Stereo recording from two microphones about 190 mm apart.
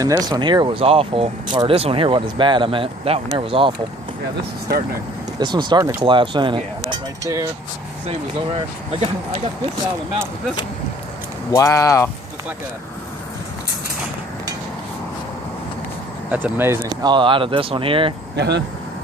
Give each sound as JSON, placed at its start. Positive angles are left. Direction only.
{"t": 0.0, "sound": "speech", "side_deg": -20}
{"t": 5.4, "sound": "speech", "side_deg": -25}
{"t": 11.5, "sound": "speech", "side_deg": 15}
{"t": 16.3, "sound": "speech", "side_deg": -10}
{"t": 18.3, "sound": "speech", "side_deg": -65}